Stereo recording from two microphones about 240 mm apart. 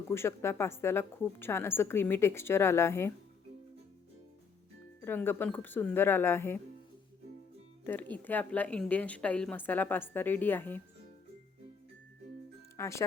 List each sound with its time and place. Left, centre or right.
0.1 s a woman's voice: centre
5.0 s a woman's voice: centre
7.9 s a woman's voice: centre
12.7 s speech: centre